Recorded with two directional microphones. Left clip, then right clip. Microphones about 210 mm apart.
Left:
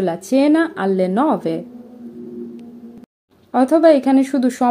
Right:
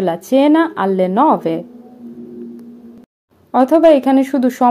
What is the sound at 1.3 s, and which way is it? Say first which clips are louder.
Speech: right 3 dB; 5° right (ahead or behind).